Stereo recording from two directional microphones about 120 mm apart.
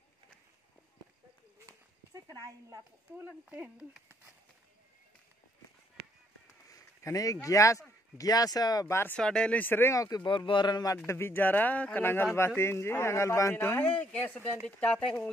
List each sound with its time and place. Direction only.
1.7 s a sound: 30° right (ahead or behind)
3.3 s speech: 15° right (ahead or behind)
6.7 s a sound: 25° left (ahead or behind)
7.4 s a man's voice: 25° left (ahead or behind)
9.1 s a man's voice: 5° left (ahead or behind); by 11.0 s 35° left (ahead or behind)
11.1 s a man's voice: 20° left (ahead or behind)